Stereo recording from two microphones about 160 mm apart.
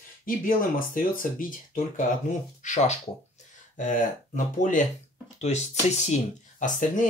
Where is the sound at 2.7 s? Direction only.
45° left (ahead or behind).